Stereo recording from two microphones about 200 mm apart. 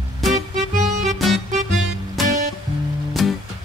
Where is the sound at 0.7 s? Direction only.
40° right (ahead or behind).